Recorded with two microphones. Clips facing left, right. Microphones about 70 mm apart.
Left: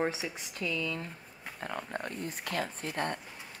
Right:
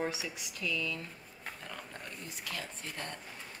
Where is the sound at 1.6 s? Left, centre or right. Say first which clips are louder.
Left 13 dB; left.